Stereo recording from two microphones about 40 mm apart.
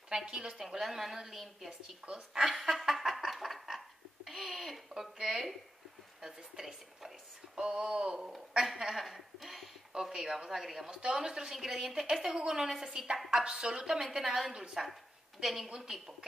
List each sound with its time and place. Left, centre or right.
0.1 s speech: centre
0.6 s a woman's voice: centre
1.7 s speech: right
2.9 s laughter: centre
5.2 s a sound: centre
6.2 s a woman's voice: centre
7.5 s speech: right
8.9 s a sound: centre
9.9 s speech: centre
10.9 s a woman's voice: right
15.4 s a woman's voice: centre
15.7 s a woman's voice: centre